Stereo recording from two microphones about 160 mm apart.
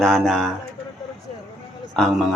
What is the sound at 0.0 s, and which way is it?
Speech, centre (ahead or behind).